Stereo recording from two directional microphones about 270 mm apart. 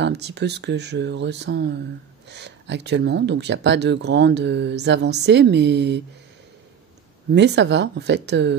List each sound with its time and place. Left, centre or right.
0.0 s speech: right
7.3 s speech: right